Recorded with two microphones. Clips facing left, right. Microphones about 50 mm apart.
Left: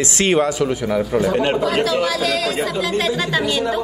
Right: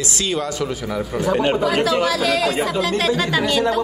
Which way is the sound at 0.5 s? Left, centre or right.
Centre.